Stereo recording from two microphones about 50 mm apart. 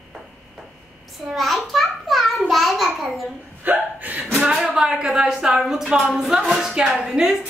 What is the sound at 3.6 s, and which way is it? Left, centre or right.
Speech, right.